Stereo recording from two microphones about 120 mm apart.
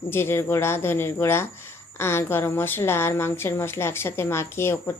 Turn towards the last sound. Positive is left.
turn(degrees=20)  # may be behind; listen again after turning